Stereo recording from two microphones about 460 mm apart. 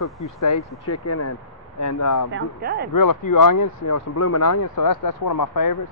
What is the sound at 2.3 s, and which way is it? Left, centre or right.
Speech, centre.